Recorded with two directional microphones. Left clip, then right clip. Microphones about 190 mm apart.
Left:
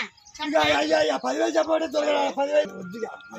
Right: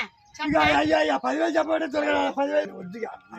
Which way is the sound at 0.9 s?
10° right (ahead or behind).